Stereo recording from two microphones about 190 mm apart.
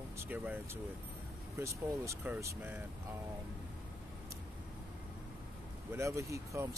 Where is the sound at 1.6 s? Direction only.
15° right (ahead or behind).